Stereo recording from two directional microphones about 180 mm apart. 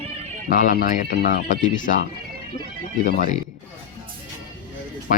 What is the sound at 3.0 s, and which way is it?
Speech, 45° left (ahead or behind).